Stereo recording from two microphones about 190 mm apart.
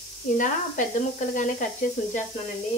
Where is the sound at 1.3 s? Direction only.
40° left (ahead or behind).